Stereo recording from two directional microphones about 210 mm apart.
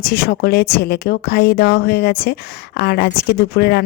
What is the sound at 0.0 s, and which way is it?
A woman's voice, 50° left (ahead or behind).